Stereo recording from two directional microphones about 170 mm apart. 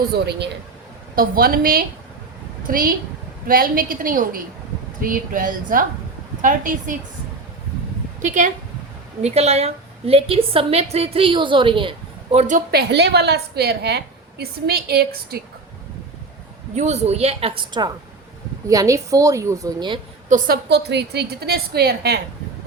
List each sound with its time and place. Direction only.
0.3 s a man's voice: 85° right
1.1 s a woman's voice: 60° right (ahead or behind)
8.2 s a woman's voice: 45° right (ahead or behind)
12.7 s a woman's voice: 85° right; by 15.4 s 70° right (ahead or behind)
16.7 s a woman's voice: 40° right (ahead or behind); by 20.0 s 25° right (ahead or behind)
20.3 s a woman's voice: 70° right (ahead or behind)